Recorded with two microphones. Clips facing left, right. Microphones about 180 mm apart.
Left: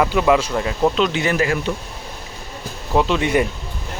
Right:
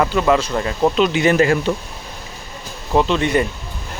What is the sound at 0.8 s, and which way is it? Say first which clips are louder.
Speech: right 2 dB; 5° right (ahead or behind).